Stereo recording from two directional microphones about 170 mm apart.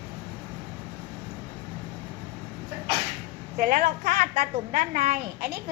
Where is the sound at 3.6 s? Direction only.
60° right (ahead or behind).